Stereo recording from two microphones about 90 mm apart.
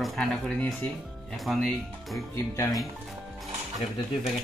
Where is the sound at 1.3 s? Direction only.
Centre (ahead or behind).